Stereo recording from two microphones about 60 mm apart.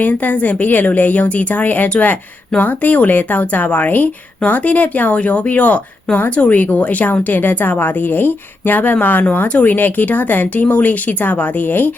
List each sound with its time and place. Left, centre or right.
0.0 s speech: left